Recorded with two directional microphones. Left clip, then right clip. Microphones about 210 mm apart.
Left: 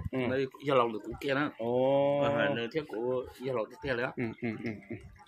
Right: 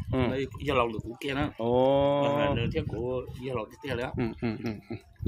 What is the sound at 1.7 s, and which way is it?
Speech, 40° right (ahead or behind).